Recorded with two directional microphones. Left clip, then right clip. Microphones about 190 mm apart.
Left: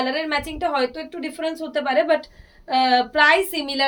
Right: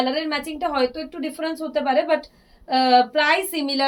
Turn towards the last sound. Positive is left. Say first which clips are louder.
# left 1 dB
turn(degrees=20)  # may be behind; listen again after turning